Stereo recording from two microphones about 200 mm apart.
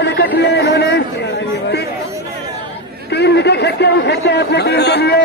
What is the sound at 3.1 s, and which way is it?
A man's voice, 55° left (ahead or behind).